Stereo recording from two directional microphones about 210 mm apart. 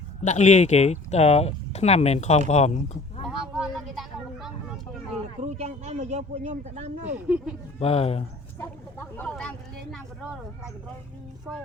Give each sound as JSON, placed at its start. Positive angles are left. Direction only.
{"t": 0.2, "sound": "speech", "side_deg": 35}
{"t": 3.2, "sound": "a sound", "side_deg": 0}
{"t": 5.1, "sound": "speech", "side_deg": -30}
{"t": 7.1, "sound": "speech", "side_deg": -5}
{"t": 7.8, "sound": "speech", "side_deg": 30}
{"t": 8.5, "sound": "speech", "side_deg": 10}